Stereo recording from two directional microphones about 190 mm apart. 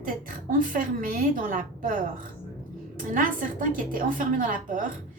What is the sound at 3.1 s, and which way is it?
A woman's voice, 45° right (ahead or behind).